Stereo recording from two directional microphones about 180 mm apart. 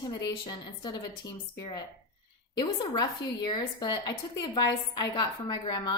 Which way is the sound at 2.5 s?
20° left (ahead or behind).